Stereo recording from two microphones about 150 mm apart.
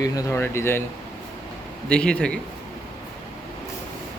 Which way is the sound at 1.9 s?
5° left (ahead or behind).